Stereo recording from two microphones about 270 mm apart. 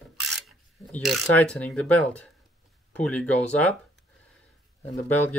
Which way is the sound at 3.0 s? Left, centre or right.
Centre.